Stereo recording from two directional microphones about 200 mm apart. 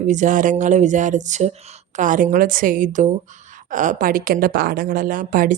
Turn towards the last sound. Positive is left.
turn(degrees=-45)  # may be behind; listen again after turning